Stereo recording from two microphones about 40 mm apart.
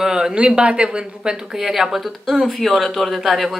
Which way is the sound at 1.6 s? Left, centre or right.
Centre.